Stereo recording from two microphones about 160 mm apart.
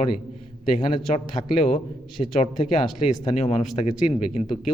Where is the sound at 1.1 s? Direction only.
45° left (ahead or behind).